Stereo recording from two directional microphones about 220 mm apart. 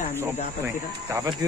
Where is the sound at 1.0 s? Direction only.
10° right (ahead or behind).